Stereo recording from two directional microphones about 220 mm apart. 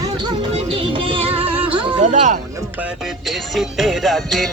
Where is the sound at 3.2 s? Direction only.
Centre (ahead or behind).